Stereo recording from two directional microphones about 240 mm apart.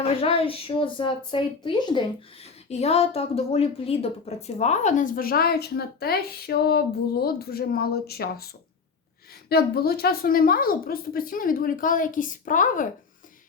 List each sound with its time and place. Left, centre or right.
0.2 s a sound: left
2.6 s a woman's voice: left
9.5 s a woman's voice: left